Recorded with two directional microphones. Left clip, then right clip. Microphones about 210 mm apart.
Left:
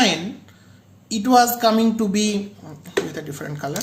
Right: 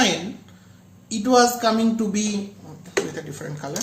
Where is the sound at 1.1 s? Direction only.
30° left (ahead or behind).